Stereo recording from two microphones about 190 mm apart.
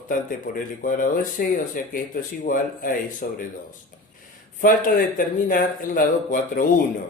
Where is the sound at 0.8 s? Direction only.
45° left (ahead or behind).